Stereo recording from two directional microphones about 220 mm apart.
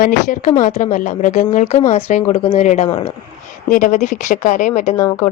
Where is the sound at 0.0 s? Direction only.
35° left (ahead or behind).